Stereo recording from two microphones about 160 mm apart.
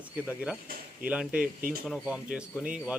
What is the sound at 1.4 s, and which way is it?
Speech, 60° right (ahead or behind).